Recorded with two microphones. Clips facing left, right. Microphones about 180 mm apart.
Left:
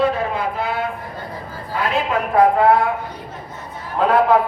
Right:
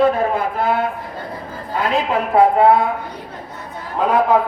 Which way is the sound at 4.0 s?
10° right (ahead or behind).